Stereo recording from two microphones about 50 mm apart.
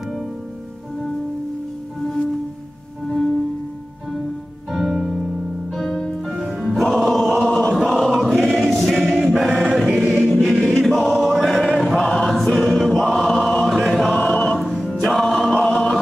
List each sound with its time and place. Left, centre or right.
3.1 s music: centre
4.6 s music: centre
7.4 s chant: centre
7.7 s choir: centre
9.1 s choir: centre
12.0 s choir: centre
14.2 s choir: left
14.6 s music: centre